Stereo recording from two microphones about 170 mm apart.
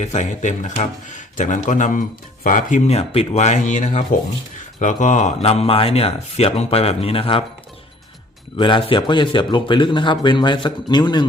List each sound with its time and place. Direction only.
0.0 s speech: 45° left (ahead or behind)
8.5 s speech: 30° left (ahead or behind)